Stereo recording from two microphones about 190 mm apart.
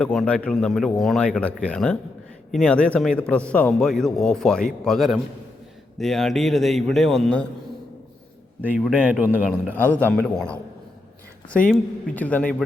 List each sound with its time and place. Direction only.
0.0 s a man's voice: 5° left (ahead or behind)
8.7 s a man's voice: 5° right (ahead or behind)
9.7 s a man's voice: 10° left (ahead or behind)
11.7 s a man's voice: 10° left (ahead or behind)